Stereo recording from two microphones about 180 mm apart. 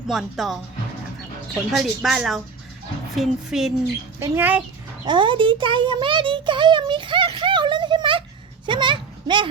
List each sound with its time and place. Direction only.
0.1 s speech: centre (ahead or behind)
1.7 s speech: centre (ahead or behind)
5.0 s a child's voice: 25° right (ahead or behind)